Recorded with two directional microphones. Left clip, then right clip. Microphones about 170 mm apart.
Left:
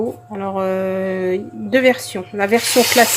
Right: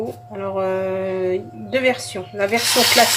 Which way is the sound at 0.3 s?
50° left (ahead or behind).